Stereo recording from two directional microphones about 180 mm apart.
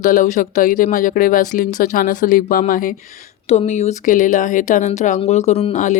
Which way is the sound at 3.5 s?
35° left (ahead or behind).